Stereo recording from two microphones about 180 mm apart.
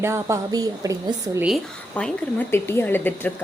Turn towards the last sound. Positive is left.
turn(degrees=10)  # may be behind; listen again after turning